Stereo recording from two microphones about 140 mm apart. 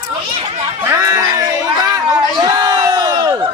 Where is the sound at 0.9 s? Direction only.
20° right (ahead or behind).